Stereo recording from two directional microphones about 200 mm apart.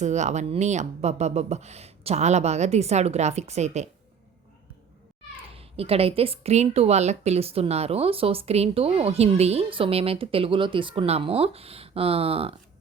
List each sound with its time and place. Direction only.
0.0 s speech: 35° right (ahead or behind)
5.5 s a woman's voice: 30° right (ahead or behind)